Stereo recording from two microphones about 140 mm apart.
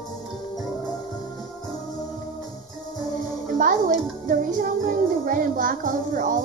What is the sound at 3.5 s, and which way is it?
A child's voice, 70° right (ahead or behind).